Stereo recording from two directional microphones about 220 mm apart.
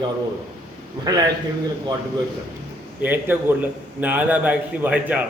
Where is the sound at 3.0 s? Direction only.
10° right (ahead or behind).